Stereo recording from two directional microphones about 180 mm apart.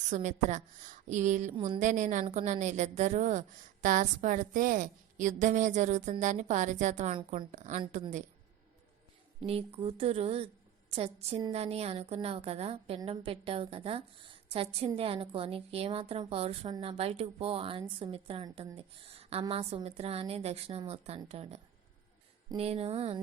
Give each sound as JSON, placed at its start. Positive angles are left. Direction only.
{"t": 0.1, "sound": "a woman's voice", "side_deg": -40}
{"t": 1.5, "sound": "a woman's voice", "side_deg": -30}
{"t": 1.8, "sound": "a woman's voice", "side_deg": -45}
{"t": 9.4, "sound": "a woman's voice", "side_deg": -35}